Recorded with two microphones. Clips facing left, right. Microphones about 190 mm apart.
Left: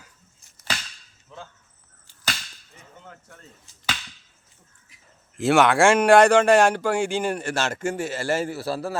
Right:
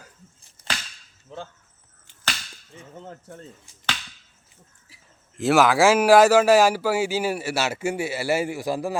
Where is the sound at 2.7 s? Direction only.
30° right (ahead or behind).